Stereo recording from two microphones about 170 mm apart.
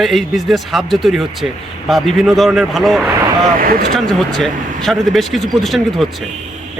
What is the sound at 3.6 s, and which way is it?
Speech, 60° right (ahead or behind).